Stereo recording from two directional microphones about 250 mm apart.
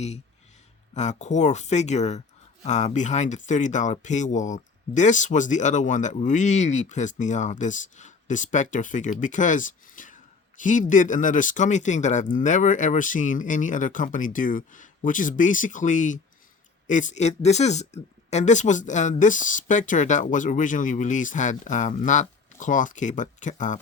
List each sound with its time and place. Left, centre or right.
0.9 s speech: left